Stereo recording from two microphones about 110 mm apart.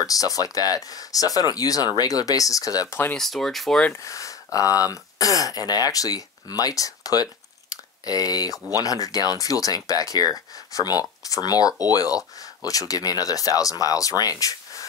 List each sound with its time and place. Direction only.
0.0 s speech: 30° left (ahead or behind)
3.2 s speech: 5° left (ahead or behind)
3.9 s speech: 30° left (ahead or behind)